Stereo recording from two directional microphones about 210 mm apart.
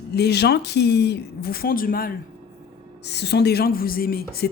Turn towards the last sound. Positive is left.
turn(degrees=45)  # may be behind; listen again after turning